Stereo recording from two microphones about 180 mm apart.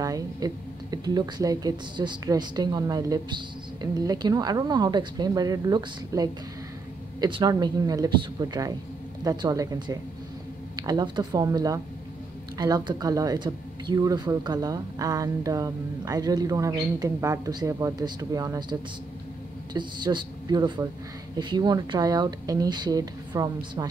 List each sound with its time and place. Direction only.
0.0 s speech: 20° right (ahead or behind)